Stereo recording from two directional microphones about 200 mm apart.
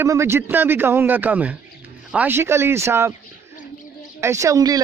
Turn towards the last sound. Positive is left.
turn(degrees=-20)  # may be behind; listen again after turning